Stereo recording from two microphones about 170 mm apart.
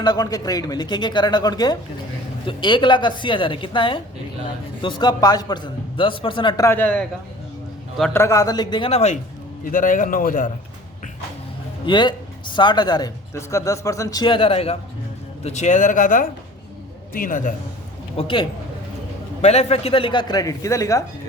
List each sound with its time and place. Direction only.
0.0 s speech: 25° left (ahead or behind)
6.7 s a man's voice: 10° left (ahead or behind)
8.1 s speech: 20° left (ahead or behind); by 9.1 s 40° left (ahead or behind)
9.7 s speech: 50° left (ahead or behind)
11.9 s speech: 30° left (ahead or behind); by 17.5 s 50° left (ahead or behind)
18.2 s speech: 30° left (ahead or behind)